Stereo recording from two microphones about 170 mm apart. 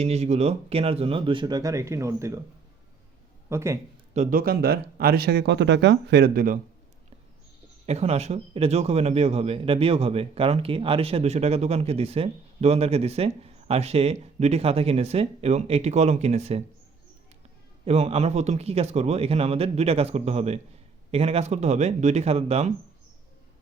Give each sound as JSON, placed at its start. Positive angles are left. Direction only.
{"t": 0.0, "sound": "speech", "side_deg": -40}
{"t": 3.5, "sound": "speech", "side_deg": -15}
{"t": 4.1, "sound": "speech", "side_deg": -50}
{"t": 7.9, "sound": "speech", "side_deg": -40}
{"t": 17.8, "sound": "speech", "side_deg": -40}